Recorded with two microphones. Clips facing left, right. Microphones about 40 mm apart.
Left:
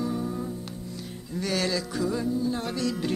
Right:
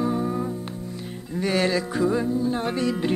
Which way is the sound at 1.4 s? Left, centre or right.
Right.